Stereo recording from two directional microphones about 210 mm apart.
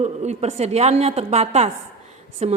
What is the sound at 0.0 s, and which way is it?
A woman's voice, 30° right (ahead or behind).